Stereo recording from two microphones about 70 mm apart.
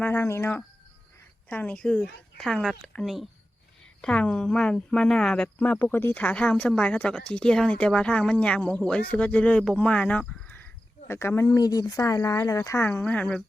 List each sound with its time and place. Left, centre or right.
0.0 s speech: left
1.5 s speech: left
1.7 s speech: centre
2.5 s speech: centre
4.0 s speech: centre
5.8 s speech: left
11.1 s speech: left
11.4 s speech: left
12.0 s speech: left
13.1 s speech: left